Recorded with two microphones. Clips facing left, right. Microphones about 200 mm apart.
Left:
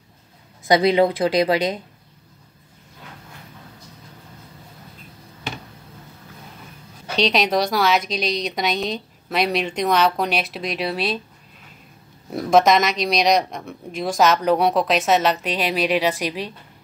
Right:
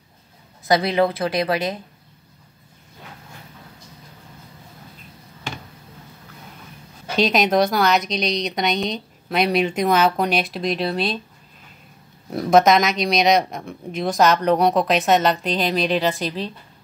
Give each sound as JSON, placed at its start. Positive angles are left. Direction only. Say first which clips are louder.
{"t": 0.7, "sound": "speech", "louder": "left 2 dB", "side_deg": 20}
{"t": 7.2, "sound": "speech", "louder": "right 2 dB", "side_deg": 0}
{"t": 12.3, "sound": "speech", "louder": "right 1 dB", "side_deg": 0}